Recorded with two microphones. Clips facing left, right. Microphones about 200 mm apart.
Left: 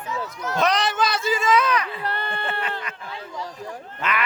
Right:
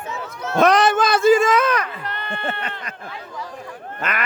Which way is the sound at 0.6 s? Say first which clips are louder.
Right 7 dB; 50° right (ahead or behind).